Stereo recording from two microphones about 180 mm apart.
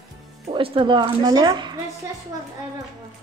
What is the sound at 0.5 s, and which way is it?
Speech, 30° right (ahead or behind).